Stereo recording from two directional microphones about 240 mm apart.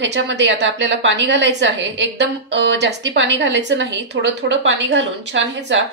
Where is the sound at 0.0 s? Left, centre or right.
Right.